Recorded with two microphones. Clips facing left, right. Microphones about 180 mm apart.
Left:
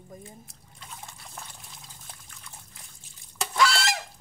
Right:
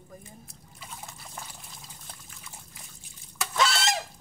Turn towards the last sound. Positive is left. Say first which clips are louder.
# left 2 dB
turn(degrees=-20)  # may be behind; listen again after turning